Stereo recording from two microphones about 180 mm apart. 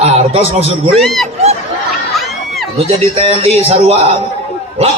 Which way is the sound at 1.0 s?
Centre (ahead or behind).